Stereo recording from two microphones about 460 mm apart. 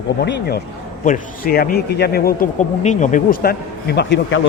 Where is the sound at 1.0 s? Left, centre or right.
Centre.